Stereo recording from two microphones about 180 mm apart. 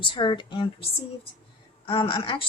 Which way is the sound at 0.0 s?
25° left (ahead or behind).